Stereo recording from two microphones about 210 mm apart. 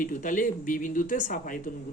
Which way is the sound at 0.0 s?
40° left (ahead or behind).